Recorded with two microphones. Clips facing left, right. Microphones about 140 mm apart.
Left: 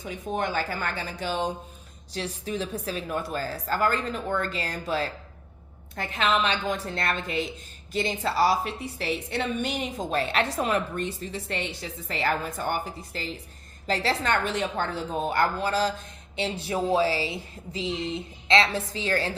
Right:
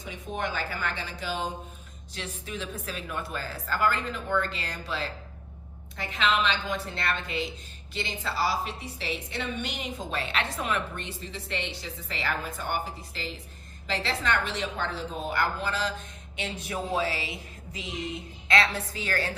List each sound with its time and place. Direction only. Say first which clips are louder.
0.1 s a woman's voice: left 4 dB; 45° left (ahead or behind); by 19.3 s 25° left (ahead or behind)